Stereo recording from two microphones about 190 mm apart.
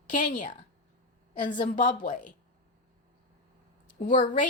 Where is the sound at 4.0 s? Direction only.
45° left (ahead or behind).